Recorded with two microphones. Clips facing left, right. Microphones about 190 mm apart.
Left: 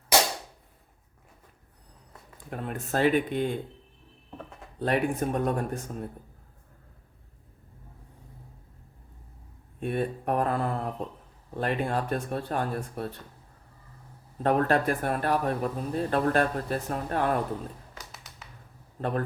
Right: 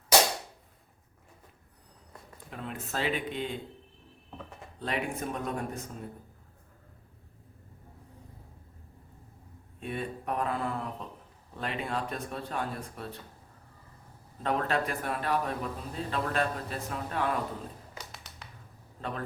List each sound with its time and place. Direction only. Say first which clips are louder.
2.5 s a man's voice: left 6 dB; 50° left (ahead or behind)
4.8 s a man's voice: left 7 dB; 50° left (ahead or behind)
9.8 s a man's voice: left 6 dB; 50° left (ahead or behind)
14.4 s a man's voice: left 6 dB; 50° left (ahead or behind)
17.9 s a sound: right 1 dB; centre (ahead or behind)